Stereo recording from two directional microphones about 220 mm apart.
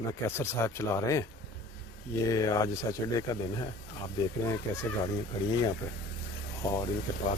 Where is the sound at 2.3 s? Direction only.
15° left (ahead or behind).